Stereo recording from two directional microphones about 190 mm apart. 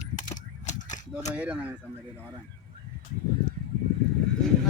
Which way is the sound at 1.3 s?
5° right (ahead or behind).